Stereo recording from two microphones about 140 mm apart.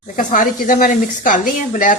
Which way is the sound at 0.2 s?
70° left (ahead or behind).